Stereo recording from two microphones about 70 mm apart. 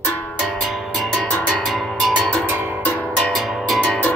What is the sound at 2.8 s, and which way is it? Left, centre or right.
Music, centre.